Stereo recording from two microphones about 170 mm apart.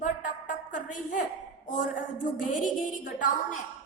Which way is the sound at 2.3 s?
50° left (ahead or behind).